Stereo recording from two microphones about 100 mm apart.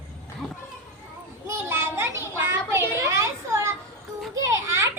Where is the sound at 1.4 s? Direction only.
25° right (ahead or behind).